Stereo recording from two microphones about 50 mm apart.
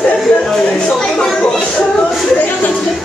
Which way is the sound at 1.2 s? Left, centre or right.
Centre.